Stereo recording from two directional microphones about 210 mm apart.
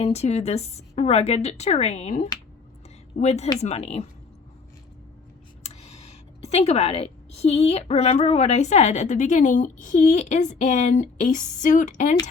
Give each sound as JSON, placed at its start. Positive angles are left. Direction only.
{"t": 0.0, "sound": "a woman's voice", "side_deg": 30}
{"t": 5.6, "sound": "a woman's voice", "side_deg": 30}